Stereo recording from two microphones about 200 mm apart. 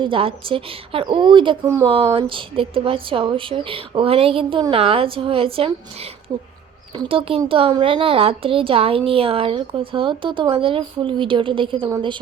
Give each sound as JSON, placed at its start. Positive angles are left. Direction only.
{"t": 0.0, "sound": "a woman's voice", "side_deg": -25}